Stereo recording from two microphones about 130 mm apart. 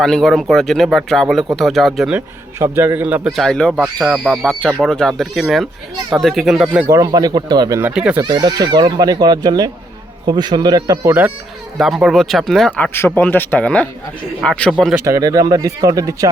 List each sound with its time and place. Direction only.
0.0 s speech: 5° left (ahead or behind)
2.1 s speech: 15° right (ahead or behind)
3.3 s speech: 5° left (ahead or behind)
6.8 s speech: 25° right (ahead or behind)
7.8 s speech: 10° right (ahead or behind)
8.2 s speech: 30° right (ahead or behind)
11.8 s speech: centre (ahead or behind)
15.0 s speech: 25° right (ahead or behind)